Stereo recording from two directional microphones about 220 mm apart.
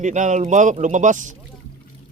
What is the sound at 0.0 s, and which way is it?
Speech, 35° right (ahead or behind).